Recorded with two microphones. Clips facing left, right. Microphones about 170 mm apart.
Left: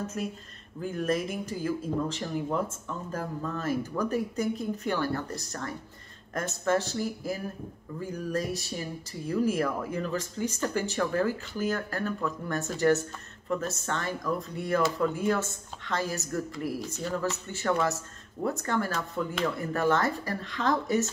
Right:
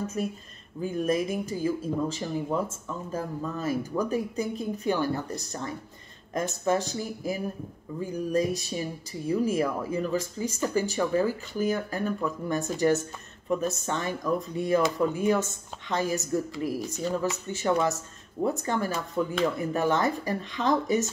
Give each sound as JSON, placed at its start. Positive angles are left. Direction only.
{"t": 0.7, "sound": "speech", "side_deg": -15}